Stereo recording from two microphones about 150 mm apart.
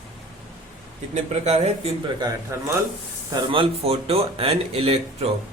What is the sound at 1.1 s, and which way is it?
Speech, 45° right (ahead or behind).